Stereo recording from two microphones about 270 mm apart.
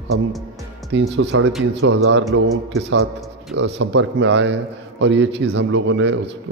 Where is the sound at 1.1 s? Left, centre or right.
Right.